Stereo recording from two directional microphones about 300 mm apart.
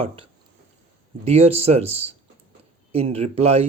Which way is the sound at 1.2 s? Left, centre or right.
Centre.